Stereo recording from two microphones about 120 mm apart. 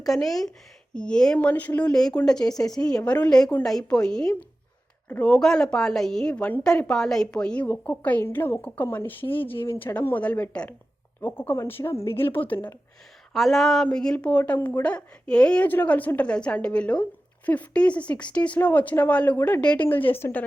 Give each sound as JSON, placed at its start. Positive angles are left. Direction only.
{"t": 0.0, "sound": "a woman's voice", "side_deg": 0}
{"t": 13.3, "sound": "a woman's voice", "side_deg": 0}